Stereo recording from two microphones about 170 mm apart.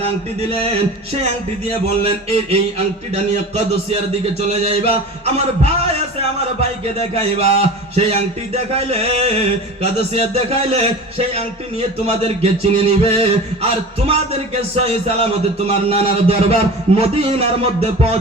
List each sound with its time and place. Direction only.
2.0 s a man's voice: 35° right (ahead or behind)
7.1 s a man's voice: 35° right (ahead or behind)